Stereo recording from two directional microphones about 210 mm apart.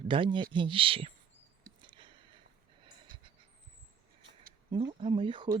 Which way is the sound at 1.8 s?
20° right (ahead or behind).